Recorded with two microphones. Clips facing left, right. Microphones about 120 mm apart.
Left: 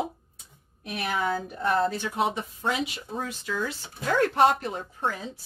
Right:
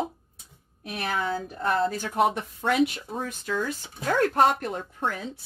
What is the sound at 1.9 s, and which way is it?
Speech, 50° right (ahead or behind).